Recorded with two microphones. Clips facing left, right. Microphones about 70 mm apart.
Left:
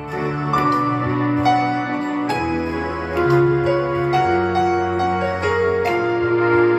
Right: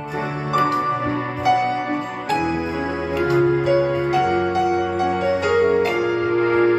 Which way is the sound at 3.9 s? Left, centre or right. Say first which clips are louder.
Left 1 dB; left.